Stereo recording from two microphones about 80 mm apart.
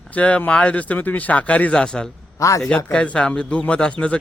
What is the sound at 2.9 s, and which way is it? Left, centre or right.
Speech, centre.